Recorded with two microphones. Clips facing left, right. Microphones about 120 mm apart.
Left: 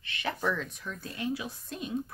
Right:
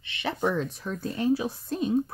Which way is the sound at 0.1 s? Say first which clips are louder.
Right 4 dB; 25° right (ahead or behind).